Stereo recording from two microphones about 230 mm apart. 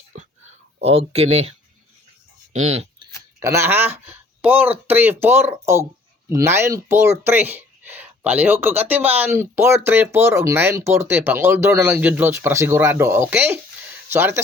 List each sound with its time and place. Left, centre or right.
0.8 s speech: right
2.6 s a sound: right
3.4 s speech: centre